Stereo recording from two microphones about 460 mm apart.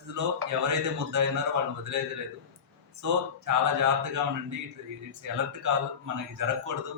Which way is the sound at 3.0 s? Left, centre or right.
Right.